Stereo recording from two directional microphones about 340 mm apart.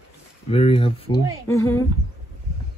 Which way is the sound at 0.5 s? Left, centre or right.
Centre.